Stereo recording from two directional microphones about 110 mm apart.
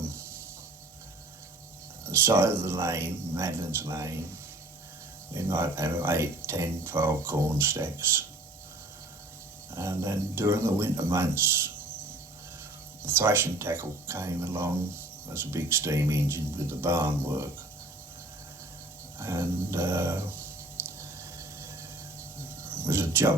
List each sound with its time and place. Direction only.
2.0 s speech: 25° right (ahead or behind)
5.3 s speech: 20° right (ahead or behind)
9.7 s speech: 25° right (ahead or behind)
13.1 s speech: 20° right (ahead or behind)
19.2 s speech: 20° right (ahead or behind)
20.8 s squish: 25° right (ahead or behind)
22.7 s speech: 20° right (ahead or behind)